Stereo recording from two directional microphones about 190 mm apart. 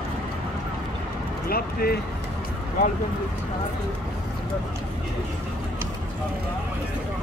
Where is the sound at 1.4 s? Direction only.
55° left (ahead or behind).